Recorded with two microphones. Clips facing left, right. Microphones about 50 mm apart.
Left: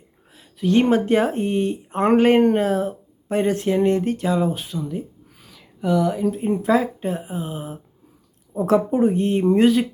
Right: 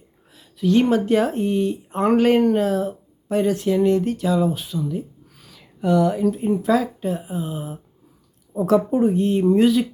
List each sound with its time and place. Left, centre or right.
0.3 s speech: left
5.4 s a sound: centre
6.5 s speech: left